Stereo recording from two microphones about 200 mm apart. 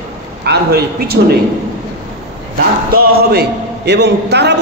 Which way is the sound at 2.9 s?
50° right (ahead or behind).